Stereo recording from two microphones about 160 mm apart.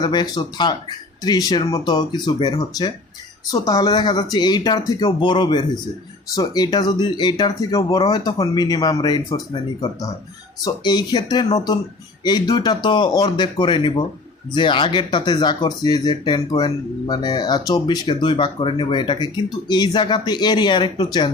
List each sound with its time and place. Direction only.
0.0 s speech: 25° left (ahead or behind)
10.6 s speech: 25° left (ahead or behind)